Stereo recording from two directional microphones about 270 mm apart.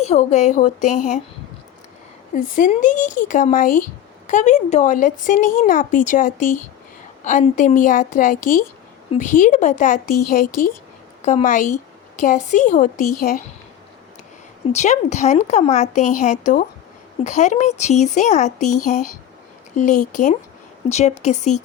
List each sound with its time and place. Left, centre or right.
0.0 s speech: left
2.3 s speech: left
14.7 s speech: left